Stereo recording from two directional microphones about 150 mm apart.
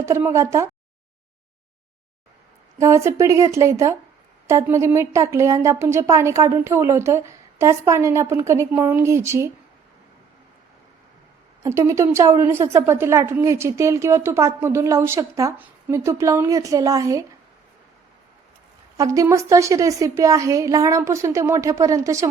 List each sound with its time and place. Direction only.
0.0 s a woman's voice: 15° right (ahead or behind)
2.7 s a woman's voice: 20° right (ahead or behind)
11.6 s a woman's voice: 20° right (ahead or behind)
18.9 s a woman's voice: 20° right (ahead or behind)